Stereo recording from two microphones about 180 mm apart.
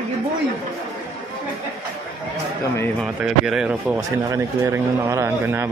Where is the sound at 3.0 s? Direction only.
5° right (ahead or behind).